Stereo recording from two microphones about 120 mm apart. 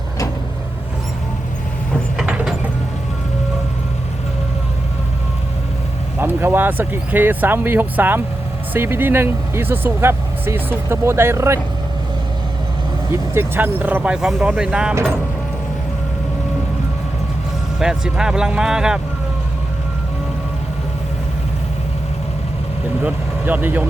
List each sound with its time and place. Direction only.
2.1 s mechanisms: 10° right (ahead or behind)
6.1 s speech: 15° right (ahead or behind)
13.3 s speech: 20° right (ahead or behind)
17.7 s speech: 5° right (ahead or behind)
23.0 s speech: 15° right (ahead or behind)